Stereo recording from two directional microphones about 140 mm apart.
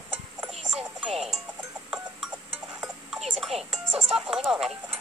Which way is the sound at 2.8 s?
Centre (ahead or behind).